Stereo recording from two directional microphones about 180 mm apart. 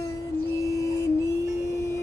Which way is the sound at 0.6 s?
15° left (ahead or behind).